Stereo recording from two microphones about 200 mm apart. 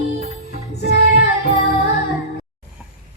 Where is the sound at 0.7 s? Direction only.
55° left (ahead or behind).